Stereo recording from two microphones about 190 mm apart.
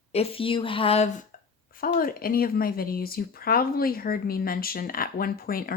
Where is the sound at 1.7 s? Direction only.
50° left (ahead or behind).